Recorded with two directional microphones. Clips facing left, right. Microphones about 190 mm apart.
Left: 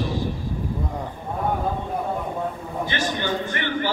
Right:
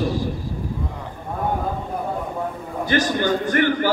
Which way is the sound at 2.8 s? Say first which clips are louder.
Right 7 dB; 45° right (ahead or behind).